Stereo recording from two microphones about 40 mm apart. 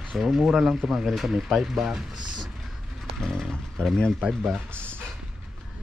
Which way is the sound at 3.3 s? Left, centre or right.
Centre.